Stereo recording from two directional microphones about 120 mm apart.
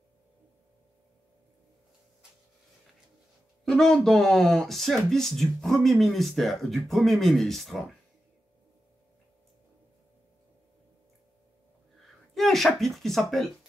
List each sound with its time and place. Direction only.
3.6 s speech: 5° left (ahead or behind)
12.4 s speech: centre (ahead or behind)